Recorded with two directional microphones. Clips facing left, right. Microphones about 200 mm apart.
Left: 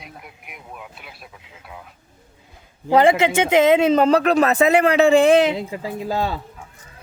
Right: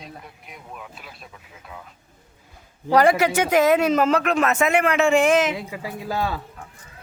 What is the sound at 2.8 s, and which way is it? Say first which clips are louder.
Speech: left 2 dB; 25° left (ahead or behind).